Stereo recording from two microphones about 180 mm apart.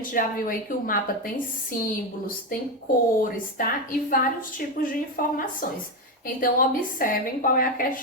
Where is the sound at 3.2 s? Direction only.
50° left (ahead or behind).